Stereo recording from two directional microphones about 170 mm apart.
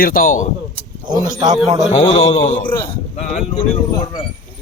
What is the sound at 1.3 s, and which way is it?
Speech, 25° right (ahead or behind).